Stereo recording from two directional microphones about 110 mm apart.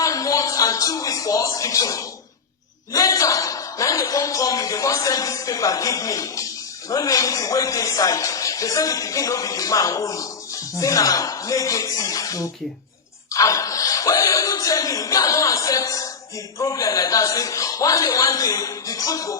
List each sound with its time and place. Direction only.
0.0 s a man's voice: 30° left (ahead or behind)